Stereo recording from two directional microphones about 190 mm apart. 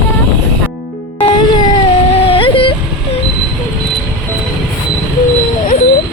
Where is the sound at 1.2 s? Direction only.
25° left (ahead or behind).